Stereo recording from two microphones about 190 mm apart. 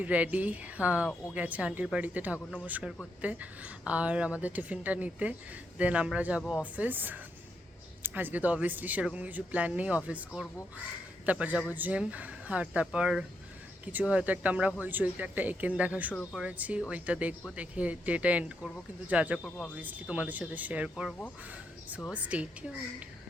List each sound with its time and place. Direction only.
0.0 s speech: 10° right (ahead or behind)
19.4 s speech: 5° left (ahead or behind)
19.7 s speech: 10° right (ahead or behind)
22.1 s speech: 5° right (ahead or behind)